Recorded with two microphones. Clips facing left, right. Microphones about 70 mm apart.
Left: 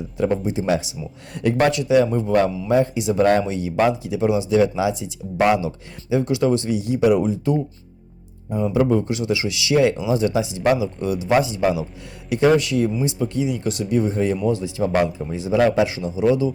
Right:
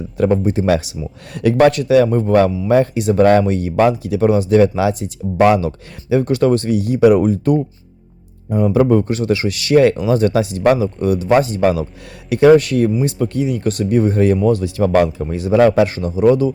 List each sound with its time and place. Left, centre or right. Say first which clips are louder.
0.2 s speech: right 6 dB; right